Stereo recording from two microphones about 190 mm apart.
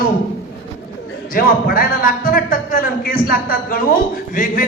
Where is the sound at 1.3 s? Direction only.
50° left (ahead or behind).